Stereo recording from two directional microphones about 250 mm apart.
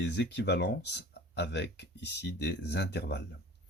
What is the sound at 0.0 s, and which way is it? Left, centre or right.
Speech, left.